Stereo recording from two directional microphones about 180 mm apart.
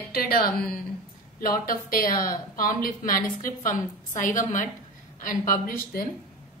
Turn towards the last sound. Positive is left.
turn(degrees=50)  # may be behind; listen again after turning